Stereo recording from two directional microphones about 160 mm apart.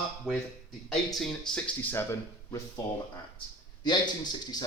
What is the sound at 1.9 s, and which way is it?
Speech, 15° left (ahead or behind).